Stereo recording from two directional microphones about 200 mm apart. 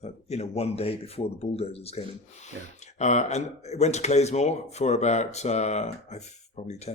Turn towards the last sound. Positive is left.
turn(degrees=35)  # may be behind; listen again after turning